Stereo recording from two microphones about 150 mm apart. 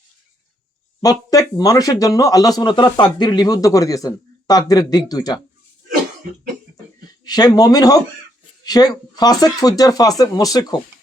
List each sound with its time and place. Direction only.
1.0 s speech: 25° left (ahead or behind)
7.3 s speech: 25° left (ahead or behind)